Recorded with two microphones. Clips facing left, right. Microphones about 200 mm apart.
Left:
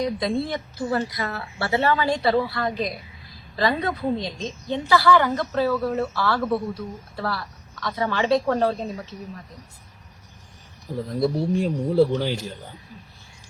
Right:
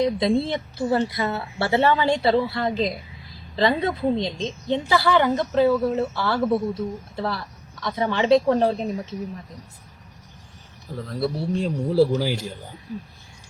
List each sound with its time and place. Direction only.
0.0 s a woman's voice: 25° right (ahead or behind)
10.9 s speech: 15° left (ahead or behind)
11.9 s speech: 5° right (ahead or behind)